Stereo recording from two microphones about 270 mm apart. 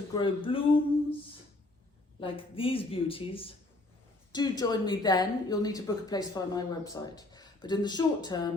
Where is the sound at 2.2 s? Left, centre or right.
Centre.